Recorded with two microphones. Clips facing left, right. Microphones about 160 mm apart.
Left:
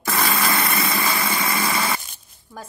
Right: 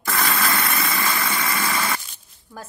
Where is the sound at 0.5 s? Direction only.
30° left (ahead or behind).